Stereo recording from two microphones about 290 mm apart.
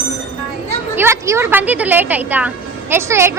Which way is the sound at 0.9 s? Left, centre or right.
Centre.